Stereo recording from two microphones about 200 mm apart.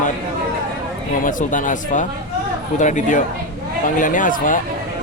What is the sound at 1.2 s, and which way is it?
Speech, 40° left (ahead or behind).